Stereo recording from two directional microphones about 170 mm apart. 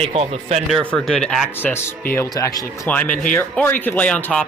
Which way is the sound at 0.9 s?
5° left (ahead or behind).